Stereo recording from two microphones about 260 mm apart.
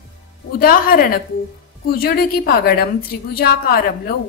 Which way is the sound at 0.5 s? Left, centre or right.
Left.